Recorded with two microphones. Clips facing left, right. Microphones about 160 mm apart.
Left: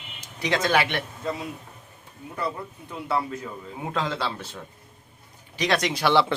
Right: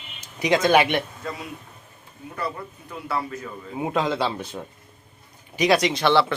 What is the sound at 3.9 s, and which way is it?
Speech, 15° right (ahead or behind).